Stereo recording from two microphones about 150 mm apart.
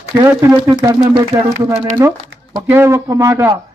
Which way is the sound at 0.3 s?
15° right (ahead or behind).